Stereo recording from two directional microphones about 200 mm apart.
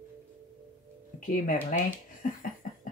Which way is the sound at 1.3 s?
45° left (ahead or behind).